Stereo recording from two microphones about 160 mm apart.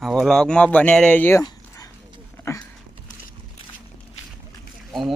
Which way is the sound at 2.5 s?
15° left (ahead or behind).